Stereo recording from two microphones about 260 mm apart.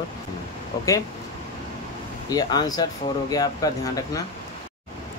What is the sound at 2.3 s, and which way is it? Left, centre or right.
Speech, centre.